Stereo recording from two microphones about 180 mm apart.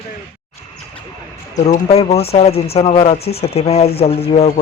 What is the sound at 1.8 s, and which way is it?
Speech, 35° left (ahead or behind).